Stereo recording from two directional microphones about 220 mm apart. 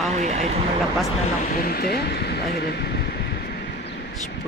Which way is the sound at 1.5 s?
45° left (ahead or behind).